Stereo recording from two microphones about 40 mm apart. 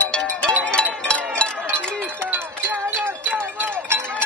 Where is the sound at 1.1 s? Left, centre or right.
Left.